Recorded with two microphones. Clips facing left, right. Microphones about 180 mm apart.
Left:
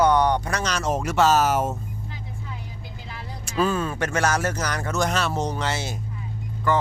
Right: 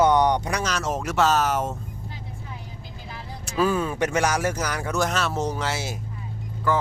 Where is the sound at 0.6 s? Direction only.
Centre (ahead or behind).